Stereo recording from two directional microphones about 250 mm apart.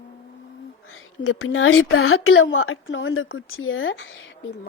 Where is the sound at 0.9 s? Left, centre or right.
Left.